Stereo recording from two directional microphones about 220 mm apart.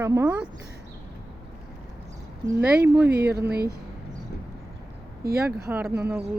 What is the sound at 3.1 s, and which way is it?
Speech, 45° right (ahead or behind).